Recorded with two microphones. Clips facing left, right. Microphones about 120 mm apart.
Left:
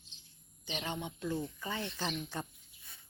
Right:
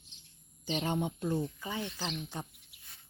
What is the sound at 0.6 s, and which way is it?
Speech, 40° right (ahead or behind).